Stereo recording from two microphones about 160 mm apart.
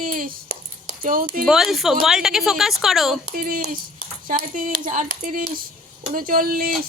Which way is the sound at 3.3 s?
65° right (ahead or behind).